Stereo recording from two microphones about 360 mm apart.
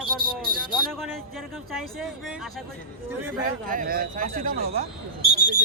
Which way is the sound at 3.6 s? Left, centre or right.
Right.